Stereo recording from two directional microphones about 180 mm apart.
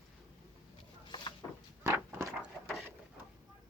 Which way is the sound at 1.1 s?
25° left (ahead or behind).